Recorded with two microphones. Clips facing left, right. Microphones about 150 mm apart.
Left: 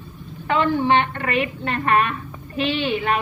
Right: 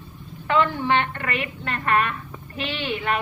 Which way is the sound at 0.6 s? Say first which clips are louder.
Left 7 dB; 20° left (ahead or behind).